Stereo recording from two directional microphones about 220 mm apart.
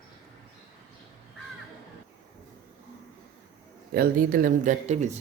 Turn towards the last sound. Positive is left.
turn(degrees=-35)  # may be behind; listen again after turning